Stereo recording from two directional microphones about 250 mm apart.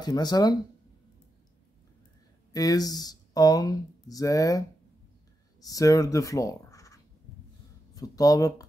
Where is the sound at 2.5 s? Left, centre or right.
Centre.